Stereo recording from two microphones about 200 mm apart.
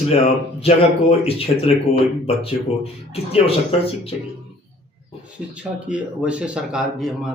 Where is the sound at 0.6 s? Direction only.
30° left (ahead or behind).